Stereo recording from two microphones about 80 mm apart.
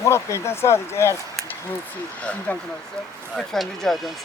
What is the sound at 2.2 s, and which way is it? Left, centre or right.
Speech, centre.